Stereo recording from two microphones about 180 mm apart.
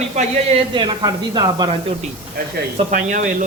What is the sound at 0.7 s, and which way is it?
Speech, 25° right (ahead or behind).